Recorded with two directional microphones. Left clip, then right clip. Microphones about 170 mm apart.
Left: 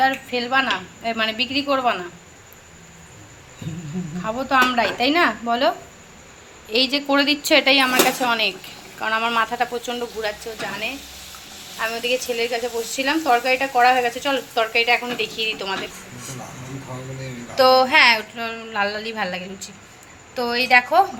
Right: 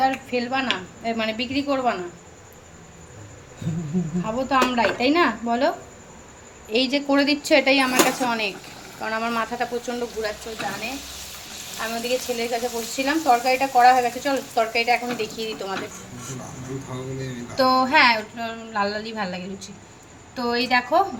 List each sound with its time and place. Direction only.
0.0 s a woman's voice: 5° left (ahead or behind)
4.2 s a woman's voice: centre (ahead or behind)
11.8 s speech: 15° left (ahead or behind)
17.6 s a woman's voice: 10° left (ahead or behind)